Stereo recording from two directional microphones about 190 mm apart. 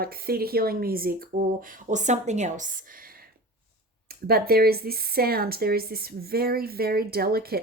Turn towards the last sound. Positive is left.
turn(degrees=-55)  # may be behind; listen again after turning